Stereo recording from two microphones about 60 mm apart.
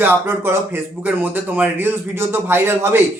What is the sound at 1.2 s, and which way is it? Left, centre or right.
A man's voice, right.